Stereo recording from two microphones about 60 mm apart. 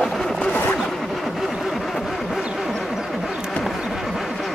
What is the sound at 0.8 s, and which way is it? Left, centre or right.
Vehicle, centre.